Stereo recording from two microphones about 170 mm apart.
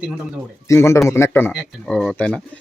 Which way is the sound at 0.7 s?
15° left (ahead or behind).